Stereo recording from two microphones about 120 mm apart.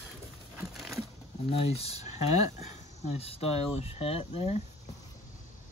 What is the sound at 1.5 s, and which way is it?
Speech, 55° left (ahead or behind).